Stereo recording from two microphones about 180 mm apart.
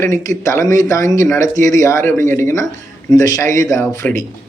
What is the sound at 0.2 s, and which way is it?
A man's voice, 15° left (ahead or behind).